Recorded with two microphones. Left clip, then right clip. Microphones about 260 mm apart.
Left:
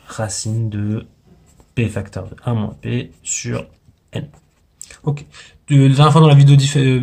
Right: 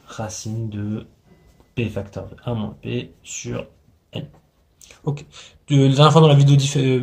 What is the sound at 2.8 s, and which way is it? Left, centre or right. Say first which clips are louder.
Speech: left 3 dB; left.